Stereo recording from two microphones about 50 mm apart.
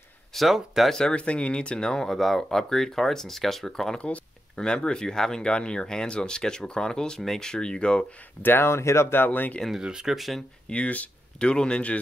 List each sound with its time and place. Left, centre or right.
0.3 s speech: centre
0.8 s speech: centre
1.1 s speech: left
8.2 s speech: left
9.1 s speech: left
9.7 s speech: centre
10.7 s speech: left